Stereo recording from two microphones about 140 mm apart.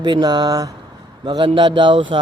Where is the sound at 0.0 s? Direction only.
30° right (ahead or behind).